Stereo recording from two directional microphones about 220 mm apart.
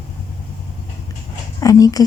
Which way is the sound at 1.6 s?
15° left (ahead or behind).